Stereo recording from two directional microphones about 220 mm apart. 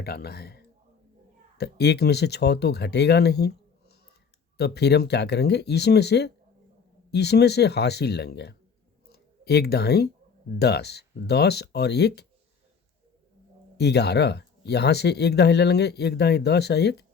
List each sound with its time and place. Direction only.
0.0 s speech: 45° left (ahead or behind)
9.0 s a sound: 45° left (ahead or behind)
10.6 s speech: 45° left (ahead or behind)
13.7 s speech: 50° left (ahead or behind)